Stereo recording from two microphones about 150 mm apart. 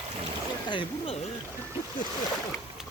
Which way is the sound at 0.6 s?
30° left (ahead or behind).